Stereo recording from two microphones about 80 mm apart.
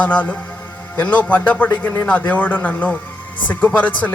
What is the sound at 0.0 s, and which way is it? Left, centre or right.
Speech, centre.